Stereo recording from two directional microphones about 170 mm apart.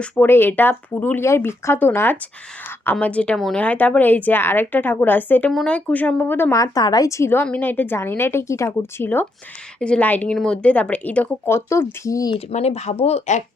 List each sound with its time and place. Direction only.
0.0 s a woman's voice: 10° left (ahead or behind)
12.5 s speech: 40° left (ahead or behind)